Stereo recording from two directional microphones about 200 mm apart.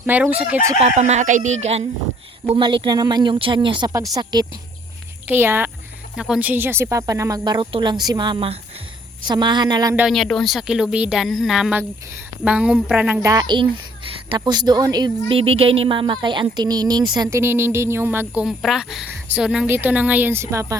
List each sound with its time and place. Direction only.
0.0 s speech: 10° right (ahead or behind)
0.8 s a woman's voice: 35° right (ahead or behind)
2.5 s speech: 25° right (ahead or behind)
5.3 s speech: 10° right (ahead or behind)
9.9 s speech: 5° right (ahead or behind)
13.3 s speech: 20° right (ahead or behind)